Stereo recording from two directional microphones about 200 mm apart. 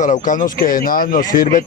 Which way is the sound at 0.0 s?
40° left (ahead or behind).